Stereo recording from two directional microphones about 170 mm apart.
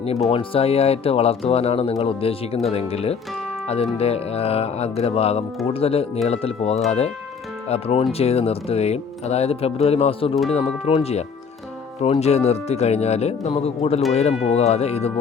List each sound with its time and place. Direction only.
0.3 s speech: 35° left (ahead or behind)
12.2 s speech: 40° left (ahead or behind)